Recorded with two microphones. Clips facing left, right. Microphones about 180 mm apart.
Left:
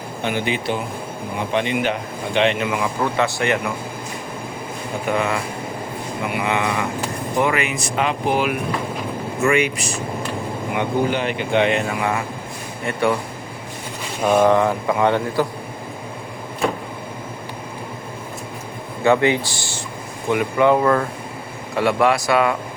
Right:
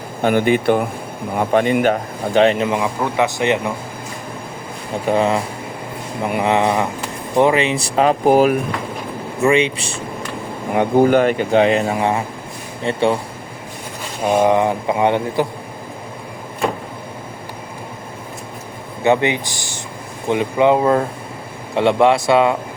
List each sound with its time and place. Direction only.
0.2 s a man's voice: 50° right (ahead or behind); by 2.8 s 30° right (ahead or behind)
3.2 s speech: 20° right (ahead or behind)
5.0 s speech: 30° right (ahead or behind)
9.4 s speech: 30° right (ahead or behind)
10.8 s speech: 45° right (ahead or behind); by 13.1 s 25° right (ahead or behind)
14.3 s speech: 20° right (ahead or behind)
19.0 s speech: 20° right (ahead or behind)